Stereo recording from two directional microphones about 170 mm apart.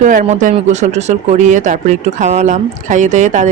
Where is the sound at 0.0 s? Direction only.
50° right (ahead or behind).